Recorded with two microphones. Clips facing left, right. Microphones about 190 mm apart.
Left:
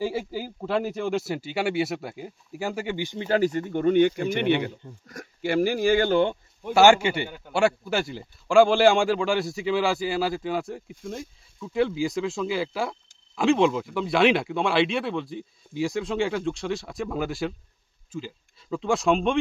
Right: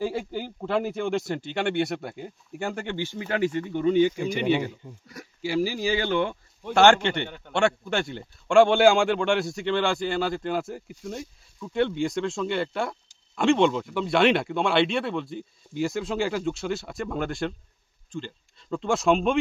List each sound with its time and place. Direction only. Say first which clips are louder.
0.0 s a man's voice: even; 5° left (ahead or behind)
3.2 s speech: left 3 dB; 35° left (ahead or behind); by 6.1 s 50° left (ahead or behind)
6.7 s a man's voice: left 1 dB; 10° left (ahead or behind)